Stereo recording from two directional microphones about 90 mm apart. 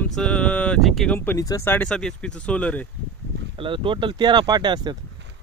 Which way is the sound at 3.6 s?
70° right (ahead or behind).